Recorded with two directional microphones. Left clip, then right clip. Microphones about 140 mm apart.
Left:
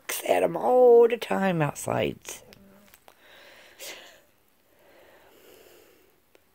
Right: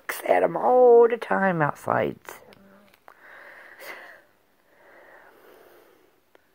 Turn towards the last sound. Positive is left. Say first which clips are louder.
# right 2 dB
turn(degrees=20)  # may be behind; listen again after turning